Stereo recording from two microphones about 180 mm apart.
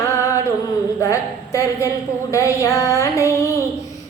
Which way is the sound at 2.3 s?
15° left (ahead or behind).